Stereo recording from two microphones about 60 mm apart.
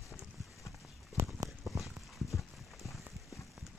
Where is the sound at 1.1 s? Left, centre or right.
Right.